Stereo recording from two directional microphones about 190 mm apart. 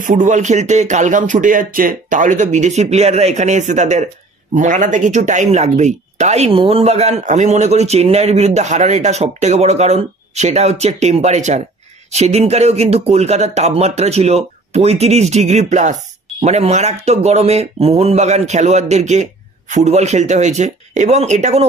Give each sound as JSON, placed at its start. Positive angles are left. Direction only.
{"t": 0.0, "sound": "speech", "side_deg": -45}